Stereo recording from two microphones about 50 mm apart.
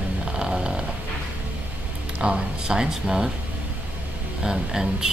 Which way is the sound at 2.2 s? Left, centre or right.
Centre.